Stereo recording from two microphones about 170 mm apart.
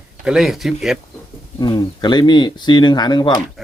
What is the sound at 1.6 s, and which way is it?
Speech, 25° left (ahead or behind).